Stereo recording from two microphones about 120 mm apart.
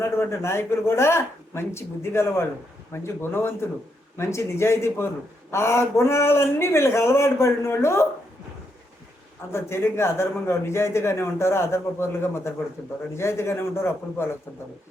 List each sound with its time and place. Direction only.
0.0 s a man's voice: 25° left (ahead or behind)
9.5 s a man's voice: 20° left (ahead or behind)